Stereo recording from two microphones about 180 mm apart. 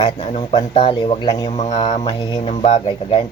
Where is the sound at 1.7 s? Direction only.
25° left (ahead or behind).